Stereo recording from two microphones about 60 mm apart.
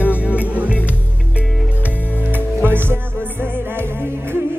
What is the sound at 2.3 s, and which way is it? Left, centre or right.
Music, right.